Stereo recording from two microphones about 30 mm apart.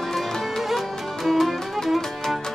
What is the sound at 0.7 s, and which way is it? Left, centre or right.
Music, centre.